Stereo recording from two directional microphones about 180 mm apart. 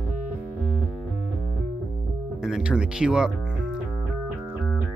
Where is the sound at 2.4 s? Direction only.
5° right (ahead or behind).